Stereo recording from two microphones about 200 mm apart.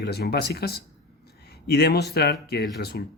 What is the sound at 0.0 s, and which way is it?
Speech, 55° left (ahead or behind).